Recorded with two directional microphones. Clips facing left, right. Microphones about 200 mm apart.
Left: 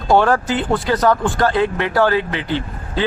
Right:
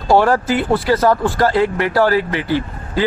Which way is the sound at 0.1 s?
Centre (ahead or behind).